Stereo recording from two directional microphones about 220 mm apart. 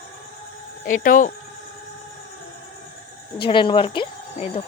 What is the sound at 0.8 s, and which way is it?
Speech, 40° left (ahead or behind).